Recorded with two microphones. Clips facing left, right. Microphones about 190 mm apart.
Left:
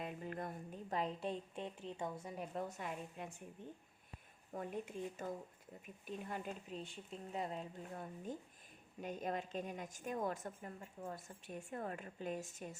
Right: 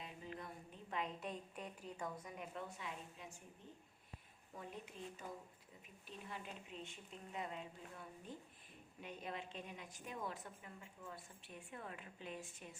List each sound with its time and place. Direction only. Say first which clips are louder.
0.0 s a woman's voice: left 7 dB; 55° left (ahead or behind)
4.5 s a woman's voice: left 8 dB; 50° left (ahead or behind)